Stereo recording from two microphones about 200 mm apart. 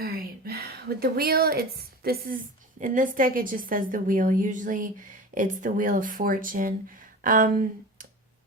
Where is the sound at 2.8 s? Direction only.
40° right (ahead or behind).